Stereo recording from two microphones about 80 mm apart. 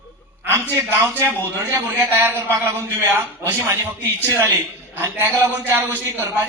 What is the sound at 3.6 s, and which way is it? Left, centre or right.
A man's voice, right.